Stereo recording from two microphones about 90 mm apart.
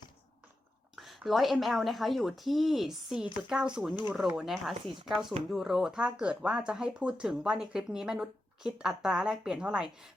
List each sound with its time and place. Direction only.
0.9 s speech: centre (ahead or behind)